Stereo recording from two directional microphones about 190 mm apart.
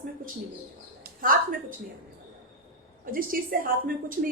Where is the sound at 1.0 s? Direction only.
45° right (ahead or behind).